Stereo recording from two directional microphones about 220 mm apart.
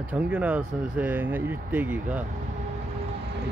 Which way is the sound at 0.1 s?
5° right (ahead or behind).